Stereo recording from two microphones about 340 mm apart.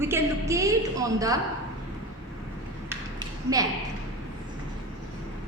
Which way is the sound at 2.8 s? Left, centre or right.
Centre.